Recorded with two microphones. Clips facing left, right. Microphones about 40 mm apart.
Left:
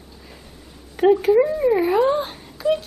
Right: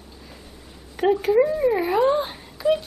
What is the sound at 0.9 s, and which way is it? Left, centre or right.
Speech, centre.